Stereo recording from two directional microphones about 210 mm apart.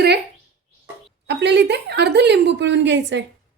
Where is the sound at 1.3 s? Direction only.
55° right (ahead or behind).